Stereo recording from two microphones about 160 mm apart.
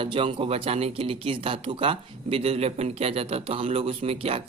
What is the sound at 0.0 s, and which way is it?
Speech, 35° right (ahead or behind).